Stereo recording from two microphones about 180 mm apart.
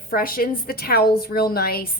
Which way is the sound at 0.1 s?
55° left (ahead or behind).